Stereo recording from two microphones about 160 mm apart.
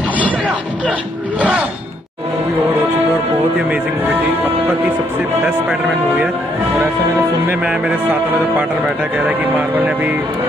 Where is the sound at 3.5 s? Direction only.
10° right (ahead or behind).